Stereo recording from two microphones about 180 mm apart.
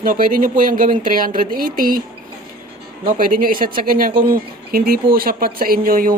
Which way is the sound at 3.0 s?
50° right (ahead or behind).